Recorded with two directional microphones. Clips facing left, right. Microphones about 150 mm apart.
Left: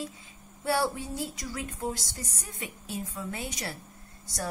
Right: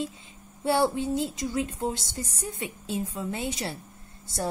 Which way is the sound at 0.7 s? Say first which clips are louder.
Right 5 dB; 25° right (ahead or behind).